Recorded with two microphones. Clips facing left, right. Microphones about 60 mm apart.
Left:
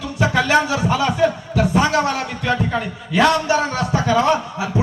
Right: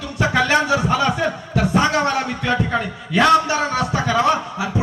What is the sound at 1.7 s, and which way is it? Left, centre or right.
Heart sounds, centre.